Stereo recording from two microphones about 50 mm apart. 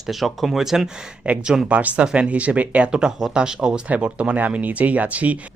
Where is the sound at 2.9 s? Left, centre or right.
Centre.